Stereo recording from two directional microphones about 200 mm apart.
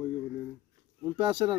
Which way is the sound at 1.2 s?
25° right (ahead or behind).